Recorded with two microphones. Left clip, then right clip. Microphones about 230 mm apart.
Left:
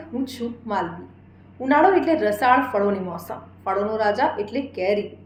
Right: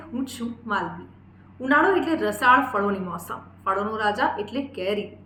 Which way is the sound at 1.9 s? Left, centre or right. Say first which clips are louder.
Left 4 dB; centre.